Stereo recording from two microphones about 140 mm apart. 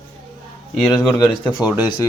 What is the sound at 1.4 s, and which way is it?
Speech, 35° left (ahead or behind).